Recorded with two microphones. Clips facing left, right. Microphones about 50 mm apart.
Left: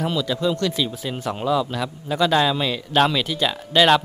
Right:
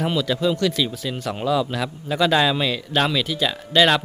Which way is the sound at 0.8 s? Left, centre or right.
Centre.